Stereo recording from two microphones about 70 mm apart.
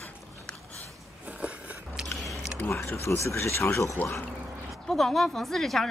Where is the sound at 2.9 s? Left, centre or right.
Left.